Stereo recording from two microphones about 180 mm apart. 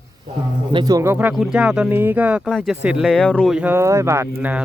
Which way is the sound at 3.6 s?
10° right (ahead or behind).